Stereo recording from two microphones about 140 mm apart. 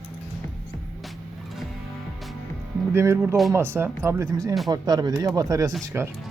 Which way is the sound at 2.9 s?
20° right (ahead or behind).